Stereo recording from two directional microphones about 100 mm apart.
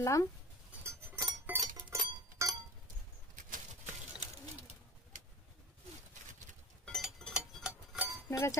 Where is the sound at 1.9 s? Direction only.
30° right (ahead or behind).